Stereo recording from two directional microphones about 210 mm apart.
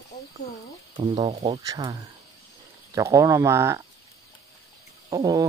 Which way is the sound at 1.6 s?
20° right (ahead or behind).